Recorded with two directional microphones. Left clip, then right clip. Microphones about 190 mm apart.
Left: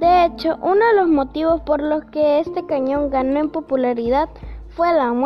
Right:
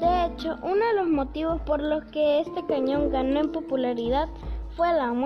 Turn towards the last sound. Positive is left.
turn(degrees=40)  # may be behind; listen again after turning